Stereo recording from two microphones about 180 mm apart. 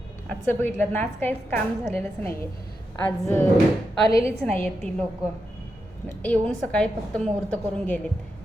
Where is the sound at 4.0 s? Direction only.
30° right (ahead or behind).